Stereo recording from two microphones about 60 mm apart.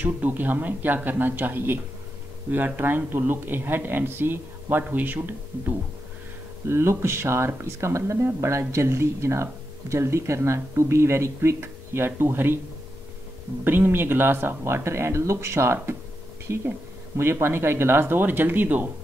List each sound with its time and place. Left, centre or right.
0.0 s speech: right
6.7 s speech: right
13.7 s speech: right